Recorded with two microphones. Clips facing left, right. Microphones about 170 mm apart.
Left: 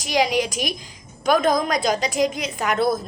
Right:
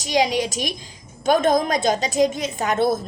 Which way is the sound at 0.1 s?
25° right (ahead or behind).